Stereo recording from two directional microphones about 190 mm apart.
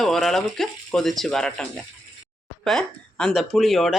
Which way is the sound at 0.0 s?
Centre (ahead or behind).